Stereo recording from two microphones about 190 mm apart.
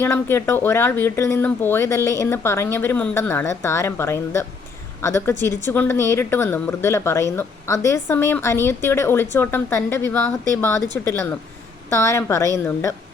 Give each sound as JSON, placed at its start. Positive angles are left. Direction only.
{"t": 0.0, "sound": "speech", "side_deg": 10}